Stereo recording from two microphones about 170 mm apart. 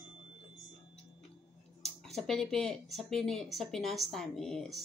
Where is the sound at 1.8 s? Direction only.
Centre (ahead or behind).